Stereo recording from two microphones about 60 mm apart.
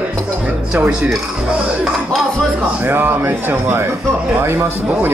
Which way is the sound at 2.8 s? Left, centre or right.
Right.